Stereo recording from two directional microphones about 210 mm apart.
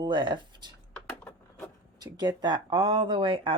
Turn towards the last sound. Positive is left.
turn(degrees=-25)  # may be behind; listen again after turning